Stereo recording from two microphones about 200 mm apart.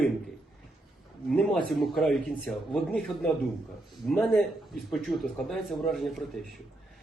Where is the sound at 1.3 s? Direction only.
Centre (ahead or behind).